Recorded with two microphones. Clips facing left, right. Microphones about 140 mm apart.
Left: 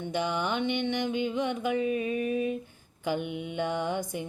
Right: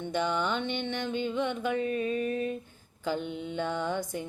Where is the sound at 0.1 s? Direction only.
10° left (ahead or behind).